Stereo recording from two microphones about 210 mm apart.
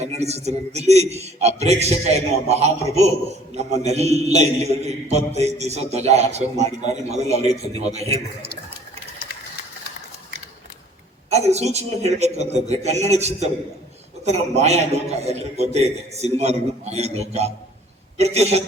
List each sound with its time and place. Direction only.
0.0 s a man's voice: 30° right (ahead or behind)
11.3 s a man's voice: 30° right (ahead or behind)